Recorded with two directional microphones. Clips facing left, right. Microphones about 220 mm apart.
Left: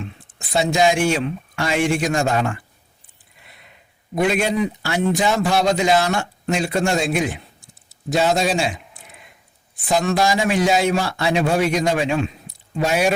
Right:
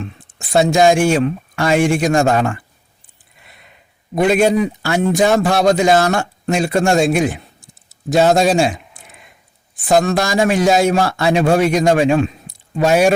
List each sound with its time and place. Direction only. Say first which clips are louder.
0.3 s a man's voice: right 5 dB; 45° right (ahead or behind)
4.1 s a man's voice: right 6 dB; 45° right (ahead or behind)
9.9 s a man's voice: right 4 dB; 45° right (ahead or behind)